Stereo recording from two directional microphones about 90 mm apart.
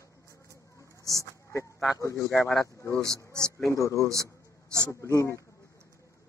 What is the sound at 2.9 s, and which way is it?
Speech, 35° right (ahead or behind).